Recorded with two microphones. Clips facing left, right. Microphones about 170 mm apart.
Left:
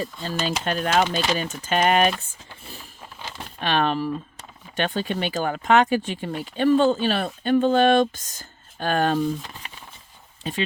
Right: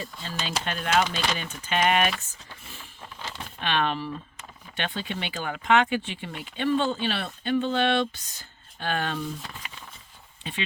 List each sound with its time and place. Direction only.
0.0 s speech: 45° left (ahead or behind)
3.6 s speech: 40° left (ahead or behind)
9.6 s a sound: 35° left (ahead or behind)
10.4 s speech: 40° left (ahead or behind)